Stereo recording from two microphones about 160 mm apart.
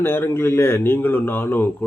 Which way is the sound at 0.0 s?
15° left (ahead or behind).